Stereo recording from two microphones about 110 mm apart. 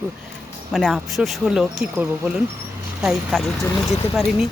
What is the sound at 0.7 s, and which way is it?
Speech, centre (ahead or behind).